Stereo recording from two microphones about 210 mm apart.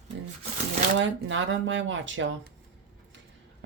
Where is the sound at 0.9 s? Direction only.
60° right (ahead or behind).